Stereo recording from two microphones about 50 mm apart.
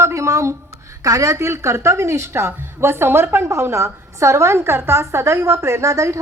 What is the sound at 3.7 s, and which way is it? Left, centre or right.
A woman's voice, right.